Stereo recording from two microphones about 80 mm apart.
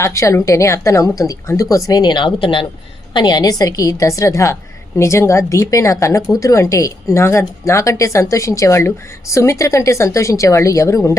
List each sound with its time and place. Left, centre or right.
0.0 s a woman's voice: left
1.9 s speech: left
3.1 s a woman's voice: left